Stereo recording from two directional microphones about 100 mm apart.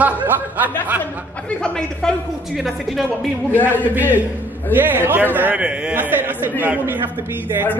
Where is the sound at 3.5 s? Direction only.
20° left (ahead or behind).